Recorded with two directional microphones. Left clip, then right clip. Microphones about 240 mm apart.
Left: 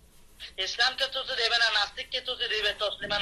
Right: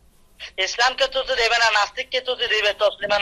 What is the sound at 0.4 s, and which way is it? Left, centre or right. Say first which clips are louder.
Speech: right 7 dB; right.